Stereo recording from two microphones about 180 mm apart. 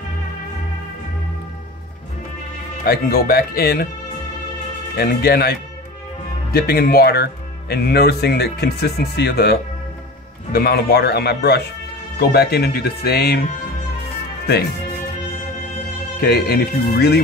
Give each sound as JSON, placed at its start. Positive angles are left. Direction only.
{"t": 2.8, "sound": "speech", "side_deg": 60}
{"t": 4.9, "sound": "speech", "side_deg": 60}
{"t": 16.2, "sound": "speech", "side_deg": 60}